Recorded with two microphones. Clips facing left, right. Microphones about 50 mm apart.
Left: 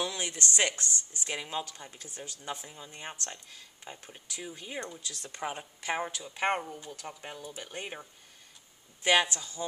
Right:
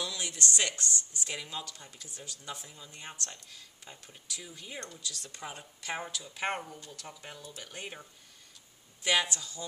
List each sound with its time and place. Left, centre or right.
0.0 s speech: left
5.0 s speech: left